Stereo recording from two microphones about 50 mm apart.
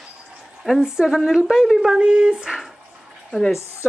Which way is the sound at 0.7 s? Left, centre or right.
Centre.